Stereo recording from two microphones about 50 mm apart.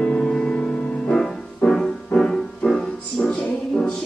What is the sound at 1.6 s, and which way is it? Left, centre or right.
Music, left.